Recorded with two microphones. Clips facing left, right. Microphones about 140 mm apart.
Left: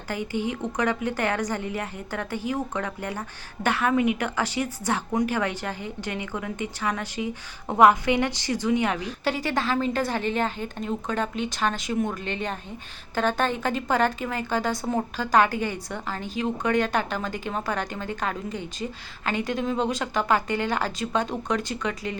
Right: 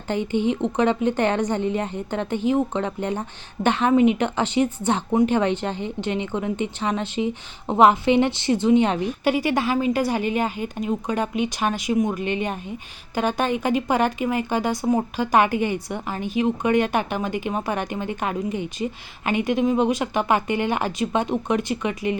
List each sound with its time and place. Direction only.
0.1 s a woman's voice: 25° right (ahead or behind)